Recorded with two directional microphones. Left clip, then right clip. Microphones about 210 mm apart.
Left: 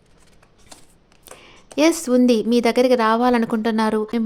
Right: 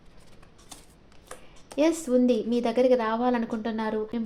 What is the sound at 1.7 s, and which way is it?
Speech, 40° left (ahead or behind).